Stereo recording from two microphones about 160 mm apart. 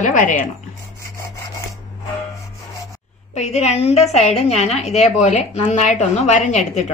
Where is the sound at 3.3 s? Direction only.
45° left (ahead or behind).